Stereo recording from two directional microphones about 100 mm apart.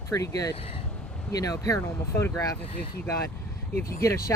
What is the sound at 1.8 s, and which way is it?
Speech, 25° left (ahead or behind).